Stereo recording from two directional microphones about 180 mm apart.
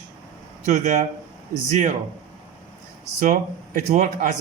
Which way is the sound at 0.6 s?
45° right (ahead or behind).